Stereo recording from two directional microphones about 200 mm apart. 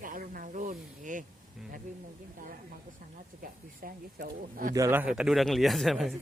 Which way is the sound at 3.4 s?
45° right (ahead or behind).